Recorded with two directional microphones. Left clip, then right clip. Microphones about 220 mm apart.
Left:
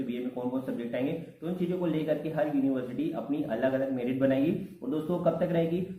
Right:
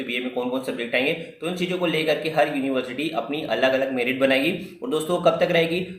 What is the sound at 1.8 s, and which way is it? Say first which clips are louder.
A man's voice: right 9 dB; 20° right (ahead or behind).